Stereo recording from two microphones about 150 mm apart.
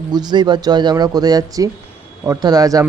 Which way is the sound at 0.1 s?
30° right (ahead or behind).